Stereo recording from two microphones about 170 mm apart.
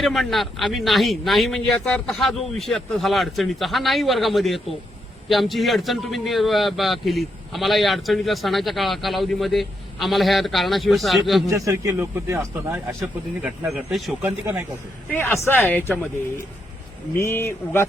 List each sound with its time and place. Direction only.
0.0 s a man's voice: centre (ahead or behind)
11.4 s a man's voice: 20° right (ahead or behind)
13.7 s a man's voice: centre (ahead or behind)
15.1 s speech: 10° left (ahead or behind)
17.2 s speech: 15° left (ahead or behind)